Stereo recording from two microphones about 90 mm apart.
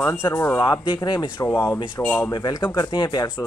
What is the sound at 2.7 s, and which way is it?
Speech, 55° left (ahead or behind).